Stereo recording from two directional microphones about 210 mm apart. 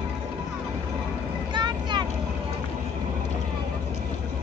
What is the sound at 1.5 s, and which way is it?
Vehicle, 20° right (ahead or behind).